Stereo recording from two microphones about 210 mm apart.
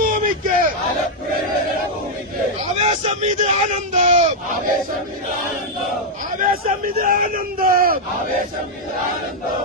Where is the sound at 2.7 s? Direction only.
30° right (ahead or behind).